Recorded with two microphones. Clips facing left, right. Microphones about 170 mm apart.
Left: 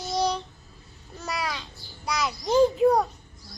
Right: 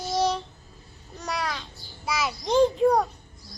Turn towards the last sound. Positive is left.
turn(degrees=0)  # may be behind; listen again after turning